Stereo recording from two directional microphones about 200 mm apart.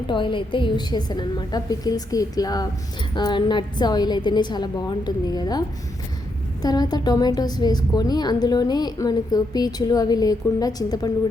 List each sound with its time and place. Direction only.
0.1 s a woman's voice: 25° left (ahead or behind)